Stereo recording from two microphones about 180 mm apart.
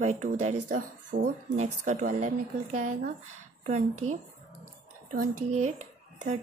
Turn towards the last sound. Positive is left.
turn(degrees=-40)  # may be behind; listen again after turning